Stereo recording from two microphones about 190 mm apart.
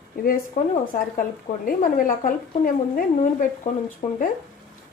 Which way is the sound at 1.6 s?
45° left (ahead or behind).